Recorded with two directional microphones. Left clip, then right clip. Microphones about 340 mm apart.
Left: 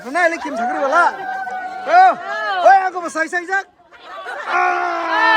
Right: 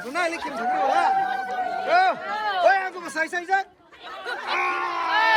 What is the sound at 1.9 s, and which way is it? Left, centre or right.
A man's voice, centre.